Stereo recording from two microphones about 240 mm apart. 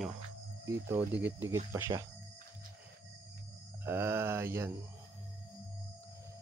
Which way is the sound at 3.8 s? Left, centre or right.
Centre.